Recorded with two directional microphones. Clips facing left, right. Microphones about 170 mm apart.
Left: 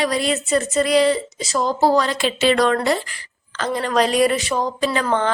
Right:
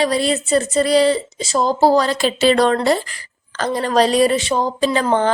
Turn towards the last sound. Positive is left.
turn(degrees=-30)  # may be behind; listen again after turning